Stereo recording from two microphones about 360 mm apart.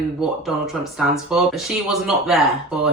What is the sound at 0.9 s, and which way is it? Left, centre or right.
Speech, centre.